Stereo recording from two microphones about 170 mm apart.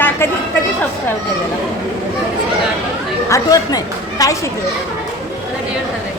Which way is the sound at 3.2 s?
20° left (ahead or behind).